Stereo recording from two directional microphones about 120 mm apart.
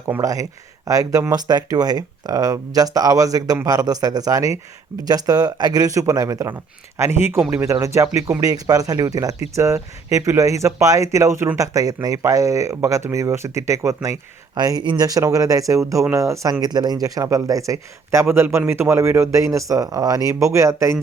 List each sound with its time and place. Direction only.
0.1 s speech: 25° right (ahead or behind)